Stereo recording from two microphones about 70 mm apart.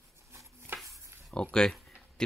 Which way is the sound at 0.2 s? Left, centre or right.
Right.